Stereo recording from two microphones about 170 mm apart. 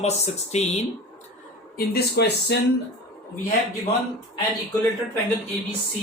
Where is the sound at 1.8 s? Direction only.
70° left (ahead or behind).